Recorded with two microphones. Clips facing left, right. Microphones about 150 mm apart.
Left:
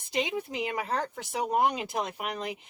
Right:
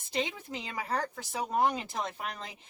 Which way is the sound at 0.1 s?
15° left (ahead or behind).